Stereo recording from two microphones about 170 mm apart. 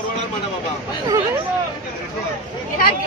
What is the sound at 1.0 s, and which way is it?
Chatter, 20° right (ahead or behind).